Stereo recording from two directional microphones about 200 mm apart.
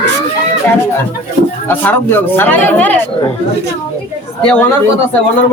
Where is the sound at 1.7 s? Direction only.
10° left (ahead or behind).